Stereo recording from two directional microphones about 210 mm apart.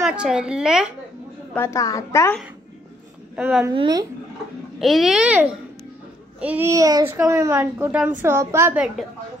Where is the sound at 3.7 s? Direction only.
20° right (ahead or behind).